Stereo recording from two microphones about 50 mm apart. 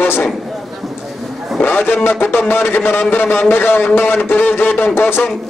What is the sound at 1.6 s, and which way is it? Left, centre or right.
A man's voice, left.